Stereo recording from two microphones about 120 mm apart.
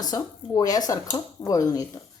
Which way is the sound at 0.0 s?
30° left (ahead or behind).